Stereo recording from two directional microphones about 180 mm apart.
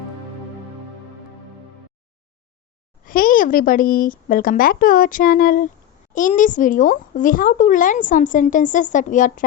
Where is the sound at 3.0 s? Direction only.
50° left (ahead or behind).